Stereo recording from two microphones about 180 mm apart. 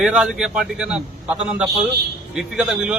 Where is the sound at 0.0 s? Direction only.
5° right (ahead or behind).